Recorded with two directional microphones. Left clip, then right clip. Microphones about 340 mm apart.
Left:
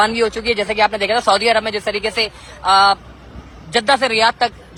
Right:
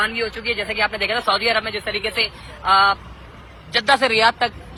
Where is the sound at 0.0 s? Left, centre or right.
Centre.